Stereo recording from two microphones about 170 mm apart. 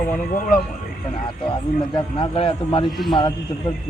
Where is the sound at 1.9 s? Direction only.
30° left (ahead or behind).